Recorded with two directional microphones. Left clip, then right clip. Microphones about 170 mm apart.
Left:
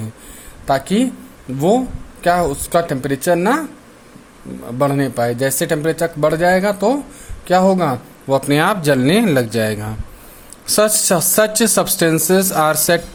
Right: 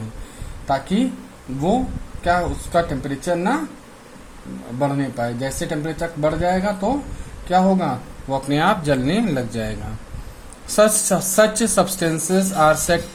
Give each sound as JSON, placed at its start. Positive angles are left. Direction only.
{"t": 0.7, "sound": "speech", "side_deg": 50}
{"t": 2.2, "sound": "speech", "side_deg": 50}
{"t": 4.8, "sound": "speech", "side_deg": 50}
{"t": 10.8, "sound": "speech", "side_deg": 40}